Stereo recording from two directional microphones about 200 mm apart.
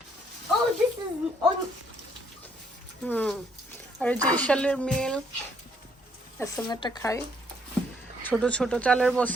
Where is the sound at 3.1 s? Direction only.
10° left (ahead or behind).